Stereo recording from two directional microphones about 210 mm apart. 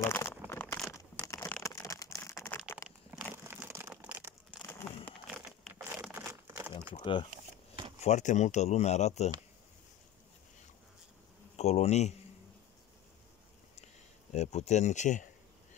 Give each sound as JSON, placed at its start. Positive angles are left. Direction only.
{"t": 0.0, "sound": "a sound", "side_deg": 10}
{"t": 1.2, "sound": "crumpling", "side_deg": 15}
{"t": 3.1, "sound": "crumpling", "side_deg": -10}
{"t": 4.6, "sound": "a sound", "side_deg": 5}
{"t": 6.1, "sound": "crumpling", "side_deg": -10}
{"t": 6.9, "sound": "speech", "side_deg": 25}
{"t": 8.0, "sound": "speech", "side_deg": 35}
{"t": 11.5, "sound": "speech", "side_deg": 30}
{"t": 14.3, "sound": "speech", "side_deg": 30}